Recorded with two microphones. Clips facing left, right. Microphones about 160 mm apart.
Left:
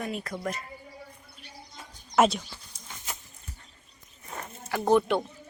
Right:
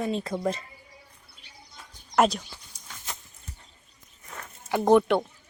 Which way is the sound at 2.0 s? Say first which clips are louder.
Even; centre (ahead or behind).